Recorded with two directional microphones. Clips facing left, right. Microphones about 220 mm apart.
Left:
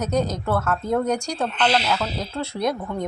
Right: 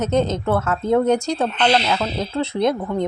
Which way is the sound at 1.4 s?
5° left (ahead or behind).